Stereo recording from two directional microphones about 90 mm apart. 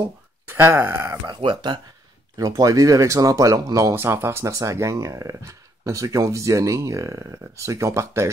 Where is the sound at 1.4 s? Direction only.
65° right (ahead or behind).